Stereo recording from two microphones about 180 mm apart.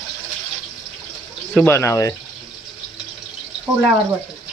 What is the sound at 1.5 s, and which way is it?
Speech, 15° left (ahead or behind).